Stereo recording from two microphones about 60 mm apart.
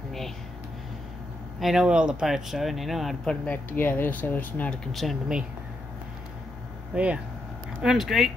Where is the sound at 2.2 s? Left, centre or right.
Centre.